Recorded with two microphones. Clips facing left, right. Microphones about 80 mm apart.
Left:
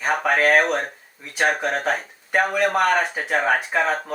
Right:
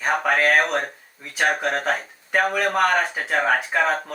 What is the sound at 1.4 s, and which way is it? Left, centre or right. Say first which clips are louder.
Speech: even; centre.